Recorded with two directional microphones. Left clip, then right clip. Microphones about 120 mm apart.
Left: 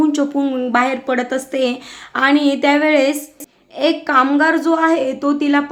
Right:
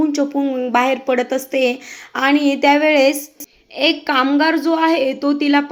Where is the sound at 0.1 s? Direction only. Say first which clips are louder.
Left 1 dB; 15° right (ahead or behind).